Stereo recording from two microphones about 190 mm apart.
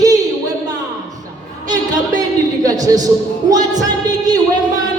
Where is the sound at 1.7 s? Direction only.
20° right (ahead or behind).